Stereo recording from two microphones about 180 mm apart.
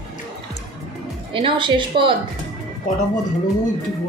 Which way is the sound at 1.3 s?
30° right (ahead or behind).